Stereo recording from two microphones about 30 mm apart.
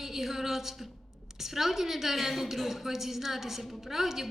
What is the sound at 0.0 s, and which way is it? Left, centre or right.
A woman's voice, centre.